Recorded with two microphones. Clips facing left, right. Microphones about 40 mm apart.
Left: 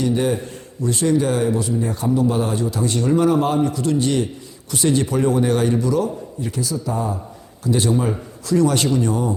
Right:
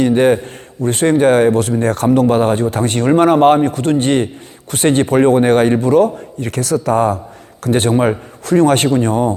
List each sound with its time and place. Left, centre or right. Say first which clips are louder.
0.0 s speech: right 8 dB; right
6.4 s speech: right 8 dB; right
7.6 s speech: right 6 dB; right